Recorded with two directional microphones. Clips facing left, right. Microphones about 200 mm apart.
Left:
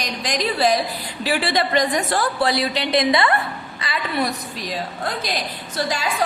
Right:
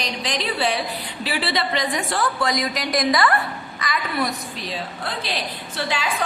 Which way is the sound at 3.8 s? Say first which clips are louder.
Left 1 dB; 30° left (ahead or behind).